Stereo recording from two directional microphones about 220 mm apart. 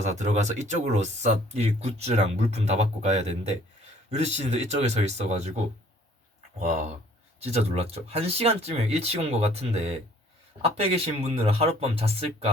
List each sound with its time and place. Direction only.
0.0 s speech: 30° right (ahead or behind)
6.6 s speech: 30° right (ahead or behind)